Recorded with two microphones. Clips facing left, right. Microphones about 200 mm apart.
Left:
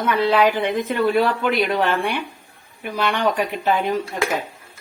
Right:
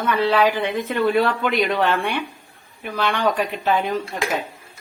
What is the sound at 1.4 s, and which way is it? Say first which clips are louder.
Speech: left 1 dB; centre (ahead or behind).